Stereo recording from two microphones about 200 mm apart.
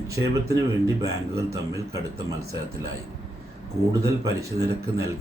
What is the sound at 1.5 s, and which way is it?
Speech, 15° right (ahead or behind).